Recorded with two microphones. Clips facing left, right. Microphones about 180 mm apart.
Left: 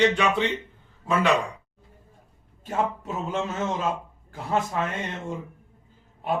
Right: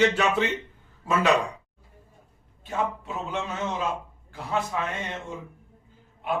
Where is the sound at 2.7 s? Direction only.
45° left (ahead or behind).